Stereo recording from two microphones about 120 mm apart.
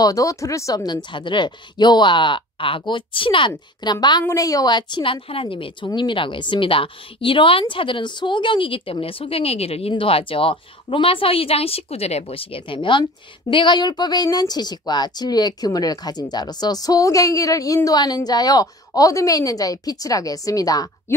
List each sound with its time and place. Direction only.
0.0 s a woman's voice: 30° left (ahead or behind)